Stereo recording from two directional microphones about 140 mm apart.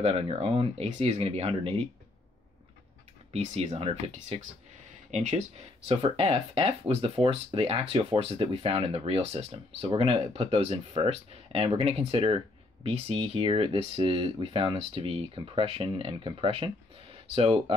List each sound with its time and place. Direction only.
0.0 s speech: 45° right (ahead or behind)
3.3 s speech: 50° right (ahead or behind)